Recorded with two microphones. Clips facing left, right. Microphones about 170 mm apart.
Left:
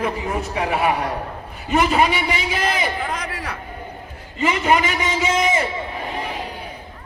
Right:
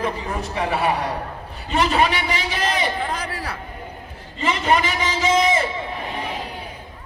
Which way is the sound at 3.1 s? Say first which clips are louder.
Even; 30° right (ahead or behind).